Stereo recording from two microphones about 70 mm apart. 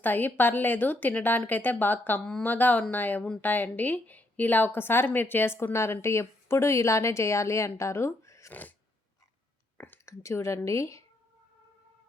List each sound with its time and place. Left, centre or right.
0.0 s a woman's voice: left
10.1 s speech: left